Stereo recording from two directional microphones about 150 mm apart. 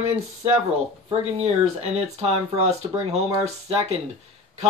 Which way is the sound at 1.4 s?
45° right (ahead or behind).